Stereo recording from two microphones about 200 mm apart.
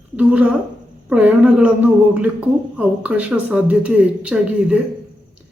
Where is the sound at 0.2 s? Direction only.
5° right (ahead or behind).